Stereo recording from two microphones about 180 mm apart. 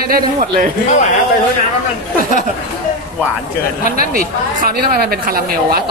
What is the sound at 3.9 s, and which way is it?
A woman's voice, 50° right (ahead or behind).